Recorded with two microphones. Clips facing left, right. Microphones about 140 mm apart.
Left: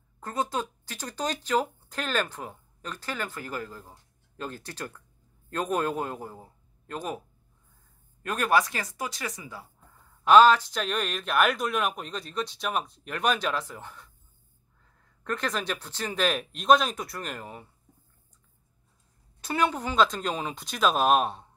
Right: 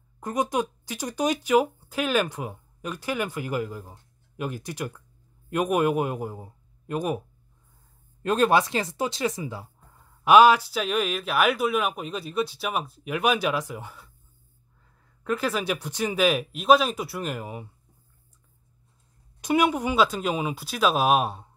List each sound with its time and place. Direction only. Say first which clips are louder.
0.2 s a man's voice: right 4 dB; 15° right (ahead or behind)
8.2 s speech: right 4 dB; 25° right (ahead or behind)
10.2 s speech: right 2 dB; 10° right (ahead or behind)
15.2 s speech: right 4 dB; 5° right (ahead or behind)
19.4 s speech: right 5 dB; 15° right (ahead or behind)